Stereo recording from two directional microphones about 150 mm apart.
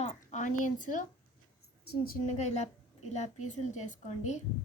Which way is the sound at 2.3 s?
50° left (ahead or behind).